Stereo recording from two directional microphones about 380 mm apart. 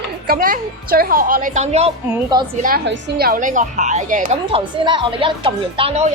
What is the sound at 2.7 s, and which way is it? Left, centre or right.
Speech, right.